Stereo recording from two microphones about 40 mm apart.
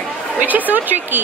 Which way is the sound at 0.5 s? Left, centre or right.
Right.